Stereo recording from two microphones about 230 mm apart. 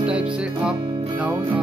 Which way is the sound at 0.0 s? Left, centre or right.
Centre.